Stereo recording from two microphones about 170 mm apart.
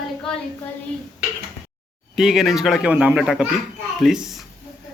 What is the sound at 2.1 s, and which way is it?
A man's voice, centre (ahead or behind).